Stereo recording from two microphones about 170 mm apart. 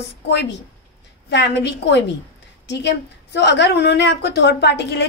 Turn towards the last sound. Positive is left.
turn(degrees=85)